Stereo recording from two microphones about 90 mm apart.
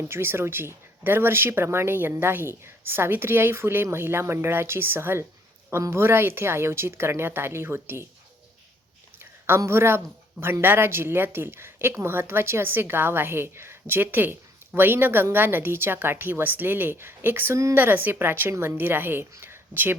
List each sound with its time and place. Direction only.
0.1 s a woman's voice: 25° right (ahead or behind)
9.6 s a woman's voice: 30° right (ahead or behind)